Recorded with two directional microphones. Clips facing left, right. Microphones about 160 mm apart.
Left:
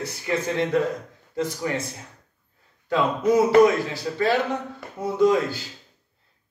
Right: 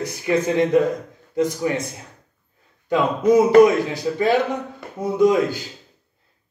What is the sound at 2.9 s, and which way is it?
Speech, 20° right (ahead or behind).